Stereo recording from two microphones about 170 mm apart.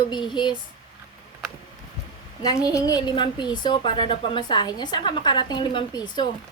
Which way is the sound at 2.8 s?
25° left (ahead or behind).